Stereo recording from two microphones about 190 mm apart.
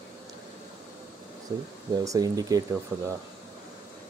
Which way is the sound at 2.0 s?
15° right (ahead or behind).